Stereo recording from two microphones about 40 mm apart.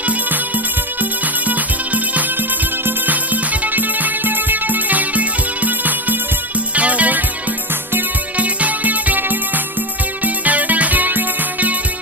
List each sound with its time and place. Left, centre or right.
1.5 s music: right
3.6 s music: right
8.4 s music: right